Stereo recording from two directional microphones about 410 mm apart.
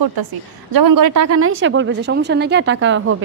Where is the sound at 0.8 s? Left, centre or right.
Right.